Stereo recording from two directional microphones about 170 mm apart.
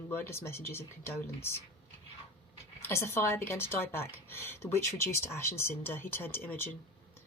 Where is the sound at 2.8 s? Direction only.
15° left (ahead or behind).